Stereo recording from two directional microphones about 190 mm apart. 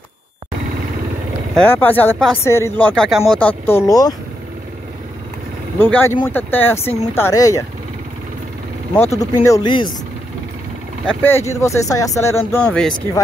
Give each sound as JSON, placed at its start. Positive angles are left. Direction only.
{"t": 1.6, "sound": "speech", "side_deg": 10}
{"t": 5.8, "sound": "speech", "side_deg": 10}
{"t": 9.2, "sound": "speech", "side_deg": 20}
{"t": 11.1, "sound": "speech", "side_deg": 10}